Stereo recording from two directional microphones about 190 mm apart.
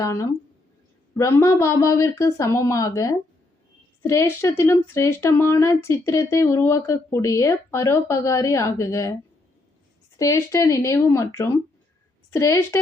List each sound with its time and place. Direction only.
0.0 s a woman's voice: 15° left (ahead or behind)
10.2 s a woman's voice: 15° left (ahead or behind)